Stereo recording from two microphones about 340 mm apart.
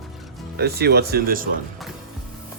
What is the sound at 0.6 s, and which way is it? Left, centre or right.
Speech, right.